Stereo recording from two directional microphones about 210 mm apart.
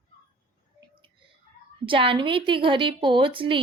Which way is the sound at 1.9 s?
25° right (ahead or behind).